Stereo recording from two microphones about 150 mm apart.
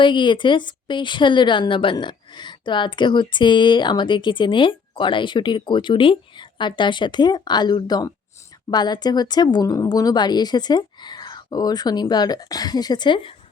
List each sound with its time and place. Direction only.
0.0 s a woman's voice: 30° left (ahead or behind)